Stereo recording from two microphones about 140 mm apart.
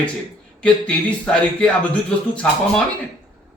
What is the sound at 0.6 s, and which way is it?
Speech, 10° left (ahead or behind).